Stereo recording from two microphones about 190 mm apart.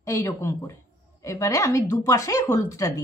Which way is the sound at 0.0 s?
15° left (ahead or behind).